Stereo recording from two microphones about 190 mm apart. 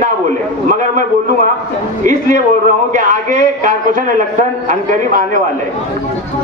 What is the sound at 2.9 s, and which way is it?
A man's voice, 40° right (ahead or behind).